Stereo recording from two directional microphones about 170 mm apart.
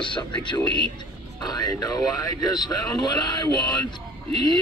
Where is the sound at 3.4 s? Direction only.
25° left (ahead or behind).